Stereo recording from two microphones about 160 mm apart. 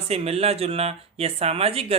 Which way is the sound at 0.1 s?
40° right (ahead or behind).